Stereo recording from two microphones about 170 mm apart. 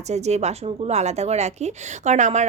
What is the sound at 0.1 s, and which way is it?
Speech, 40° right (ahead or behind).